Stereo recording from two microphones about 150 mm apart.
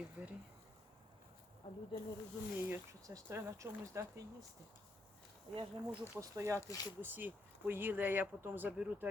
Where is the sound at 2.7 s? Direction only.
20° right (ahead or behind).